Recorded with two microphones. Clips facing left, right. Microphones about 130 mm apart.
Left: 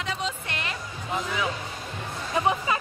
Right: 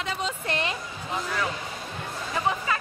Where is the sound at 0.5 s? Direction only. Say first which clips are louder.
Right 5 dB; 25° right (ahead or behind).